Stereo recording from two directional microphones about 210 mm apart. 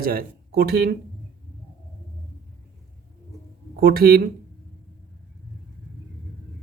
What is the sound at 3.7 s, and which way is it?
Speech, 45° right (ahead or behind).